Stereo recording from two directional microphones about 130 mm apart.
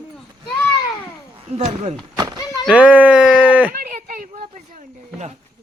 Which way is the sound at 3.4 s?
10° right (ahead or behind).